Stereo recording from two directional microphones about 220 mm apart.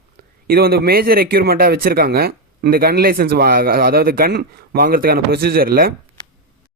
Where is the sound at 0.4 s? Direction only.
45° right (ahead or behind).